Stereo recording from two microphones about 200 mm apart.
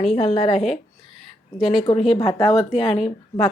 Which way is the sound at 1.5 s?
Centre (ahead or behind).